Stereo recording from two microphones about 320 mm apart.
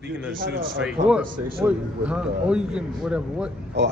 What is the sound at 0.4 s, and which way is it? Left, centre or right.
Speech, right.